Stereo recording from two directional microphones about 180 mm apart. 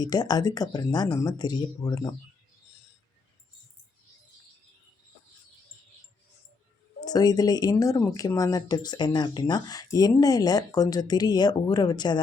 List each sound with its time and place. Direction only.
0.0 s speech: 20° left (ahead or behind)
7.0 s speech: 20° left (ahead or behind)